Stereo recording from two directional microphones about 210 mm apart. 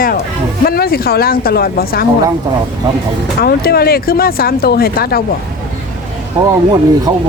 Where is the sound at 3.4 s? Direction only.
45° left (ahead or behind).